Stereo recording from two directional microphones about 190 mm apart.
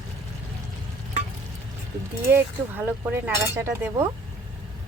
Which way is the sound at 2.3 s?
10° right (ahead or behind).